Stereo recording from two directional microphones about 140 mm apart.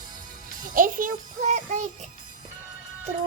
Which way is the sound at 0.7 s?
75° right (ahead or behind).